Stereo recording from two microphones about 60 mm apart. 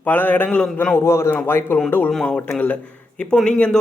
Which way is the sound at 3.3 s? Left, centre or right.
Centre.